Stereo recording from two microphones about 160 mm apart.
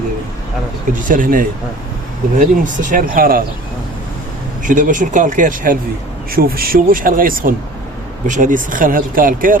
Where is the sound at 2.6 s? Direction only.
55° right (ahead or behind).